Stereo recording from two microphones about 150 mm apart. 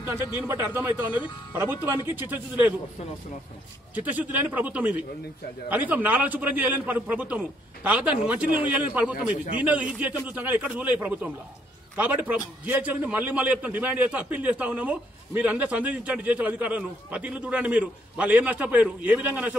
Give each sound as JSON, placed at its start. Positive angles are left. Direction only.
{"t": 0.5, "sound": "a man's voice", "side_deg": -15}
{"t": 3.9, "sound": "a man's voice", "side_deg": -10}